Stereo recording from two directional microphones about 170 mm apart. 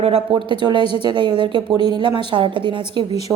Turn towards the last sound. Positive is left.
turn(degrees=-30)  # may be behind; listen again after turning